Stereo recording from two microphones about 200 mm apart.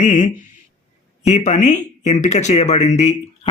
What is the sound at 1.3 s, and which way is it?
Speech, 35° left (ahead or behind).